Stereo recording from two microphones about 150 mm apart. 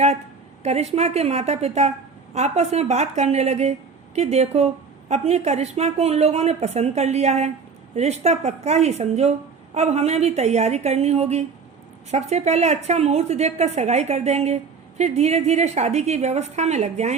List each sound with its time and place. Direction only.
0.6 s speech: 45° right (ahead or behind)